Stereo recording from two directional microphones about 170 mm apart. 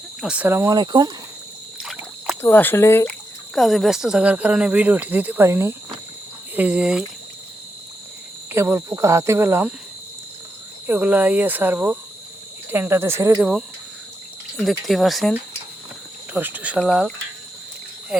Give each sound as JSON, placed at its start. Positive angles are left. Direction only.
{"t": 0.2, "sound": "speech", "side_deg": -5}
{"t": 0.8, "sound": "speech", "side_deg": -25}
{"t": 1.8, "sound": "rowboat", "side_deg": -5}
{"t": 2.4, "sound": "speech", "side_deg": 10}
{"t": 3.5, "sound": "speech", "side_deg": 0}
{"t": 8.5, "sound": "speech", "side_deg": -15}
{"t": 10.8, "sound": "speech", "side_deg": -10}
{"t": 14.5, "sound": "speech", "side_deg": 0}
{"t": 16.3, "sound": "speech", "side_deg": -10}
{"t": 18.1, "sound": "insect", "side_deg": -5}